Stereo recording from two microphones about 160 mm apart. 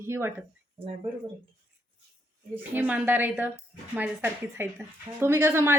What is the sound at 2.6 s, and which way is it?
A woman's voice, 10° right (ahead or behind).